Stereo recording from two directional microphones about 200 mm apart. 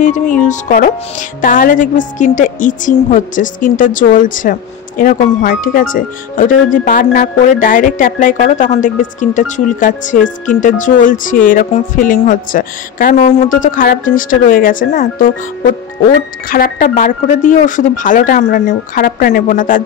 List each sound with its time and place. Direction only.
0.0 s a woman's voice: 40° left (ahead or behind)